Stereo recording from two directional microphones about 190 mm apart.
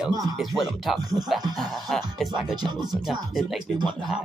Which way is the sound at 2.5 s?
20° right (ahead or behind).